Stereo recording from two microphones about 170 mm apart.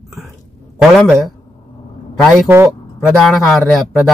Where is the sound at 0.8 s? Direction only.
Centre (ahead or behind).